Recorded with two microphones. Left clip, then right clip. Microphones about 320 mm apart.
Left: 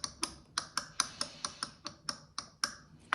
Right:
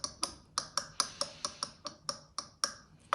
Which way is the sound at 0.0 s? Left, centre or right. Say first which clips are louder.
Right 1 dB; centre.